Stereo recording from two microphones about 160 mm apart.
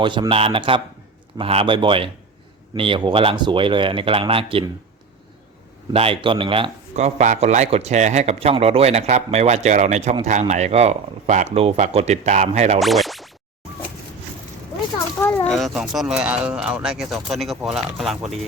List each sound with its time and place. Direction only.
0.0 s speech: 30° right (ahead or behind)
5.9 s a man's voice: 35° right (ahead or behind)
12.8 s scratch: centre (ahead or behind)
15.2 s a sound: 15° left (ahead or behind)
15.5 s speech: centre (ahead or behind)